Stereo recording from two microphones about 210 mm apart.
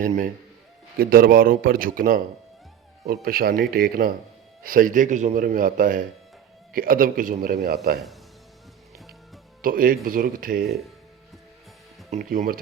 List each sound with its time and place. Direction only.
0.0 s speech: 40° right (ahead or behind)
9.6 s speech: 40° right (ahead or behind)
12.1 s speech: 40° right (ahead or behind)